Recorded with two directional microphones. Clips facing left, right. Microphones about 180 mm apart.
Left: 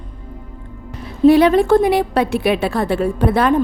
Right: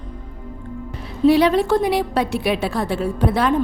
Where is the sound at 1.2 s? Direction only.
50° left (ahead or behind).